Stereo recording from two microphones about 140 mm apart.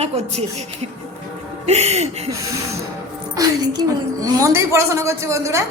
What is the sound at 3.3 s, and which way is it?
A woman's voice, 25° right (ahead or behind).